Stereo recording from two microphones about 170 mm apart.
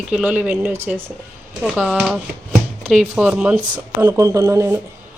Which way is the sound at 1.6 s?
Centre (ahead or behind).